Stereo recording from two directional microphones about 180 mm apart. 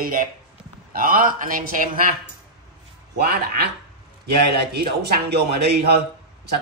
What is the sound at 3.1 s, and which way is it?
A man's voice, 60° right (ahead or behind).